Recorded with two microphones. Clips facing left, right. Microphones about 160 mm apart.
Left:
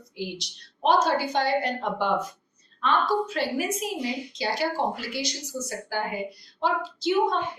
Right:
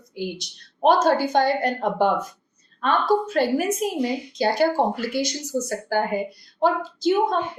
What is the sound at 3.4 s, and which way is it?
A woman's voice, 50° right (ahead or behind).